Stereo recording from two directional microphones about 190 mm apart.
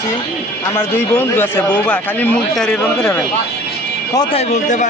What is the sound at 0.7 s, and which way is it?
A man's voice, 15° left (ahead or behind).